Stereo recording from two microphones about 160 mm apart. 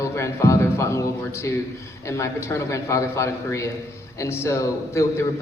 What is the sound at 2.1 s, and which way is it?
A man's voice, 20° left (ahead or behind).